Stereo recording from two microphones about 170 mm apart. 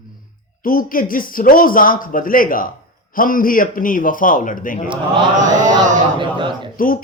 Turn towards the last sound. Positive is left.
turn(degrees=55)  # may be behind; listen again after turning